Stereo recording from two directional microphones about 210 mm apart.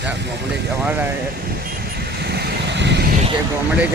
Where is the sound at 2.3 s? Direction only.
55° right (ahead or behind).